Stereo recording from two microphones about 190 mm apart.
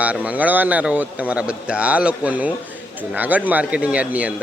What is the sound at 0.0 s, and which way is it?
Speech, 5° right (ahead or behind).